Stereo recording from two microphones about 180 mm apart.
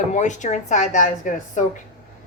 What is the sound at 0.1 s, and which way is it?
Speech, 40° left (ahead or behind).